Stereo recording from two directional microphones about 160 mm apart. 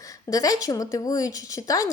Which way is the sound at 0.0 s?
20° left (ahead or behind).